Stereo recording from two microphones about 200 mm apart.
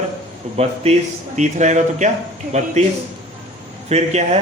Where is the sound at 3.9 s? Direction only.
35° right (ahead or behind).